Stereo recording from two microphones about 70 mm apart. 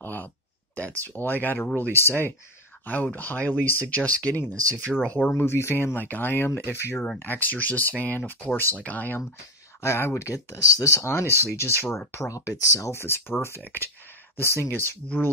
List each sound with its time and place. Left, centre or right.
0.0 s a sound: left
0.7 s speech: left
5.3 s speech: left
9.8 s speech: left
12.3 s speech: left
14.6 s speech: left